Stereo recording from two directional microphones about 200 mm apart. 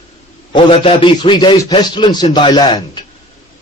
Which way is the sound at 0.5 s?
25° left (ahead or behind).